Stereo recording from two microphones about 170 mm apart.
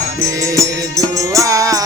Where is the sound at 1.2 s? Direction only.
20° right (ahead or behind).